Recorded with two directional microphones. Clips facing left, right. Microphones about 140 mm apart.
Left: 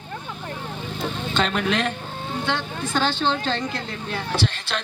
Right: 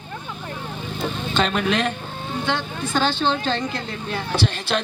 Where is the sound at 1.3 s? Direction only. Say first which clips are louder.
Right 2 dB; 15° right (ahead or behind).